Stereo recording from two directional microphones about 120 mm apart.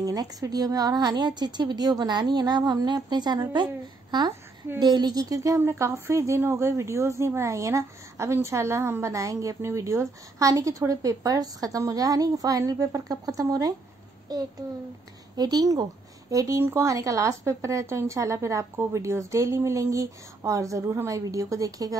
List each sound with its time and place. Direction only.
0.0 s a woman's voice: 30° right (ahead or behind)